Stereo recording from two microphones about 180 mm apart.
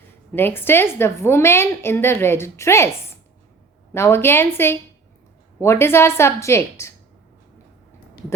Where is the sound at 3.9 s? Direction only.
15° left (ahead or behind).